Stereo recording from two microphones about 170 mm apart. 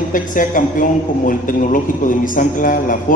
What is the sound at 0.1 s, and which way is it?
A man's voice, 50° left (ahead or behind).